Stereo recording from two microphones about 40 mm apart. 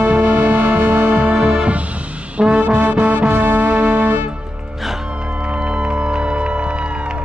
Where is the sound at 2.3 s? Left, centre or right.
Right.